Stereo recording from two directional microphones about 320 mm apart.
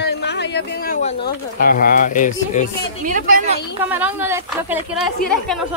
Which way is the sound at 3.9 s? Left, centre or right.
Centre.